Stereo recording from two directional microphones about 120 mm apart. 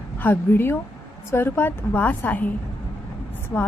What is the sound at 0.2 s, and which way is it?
A woman's voice, 15° left (ahead or behind).